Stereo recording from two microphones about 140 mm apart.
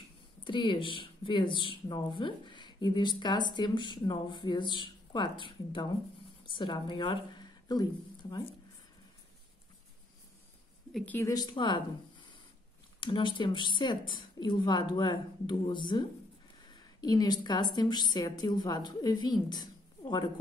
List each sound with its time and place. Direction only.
0.4 s a woman's voice: 35° left (ahead or behind)
11.1 s speech: 15° left (ahead or behind)
11.3 s speech: 30° left (ahead or behind)
13.0 s speech: 35° left (ahead or behind)